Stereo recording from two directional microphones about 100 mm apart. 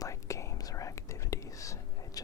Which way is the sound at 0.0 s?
30° left (ahead or behind).